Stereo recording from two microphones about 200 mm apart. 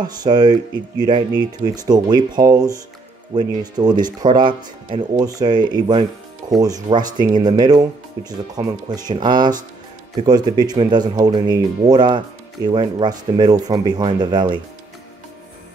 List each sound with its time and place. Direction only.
0.0 s speech: 20° right (ahead or behind)